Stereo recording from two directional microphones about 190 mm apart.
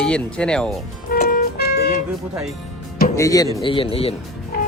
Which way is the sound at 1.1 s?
50° left (ahead or behind).